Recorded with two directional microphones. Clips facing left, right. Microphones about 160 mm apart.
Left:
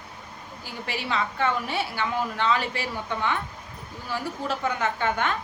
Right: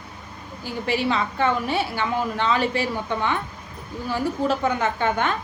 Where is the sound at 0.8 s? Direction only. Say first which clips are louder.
Right 6 dB; 25° right (ahead or behind).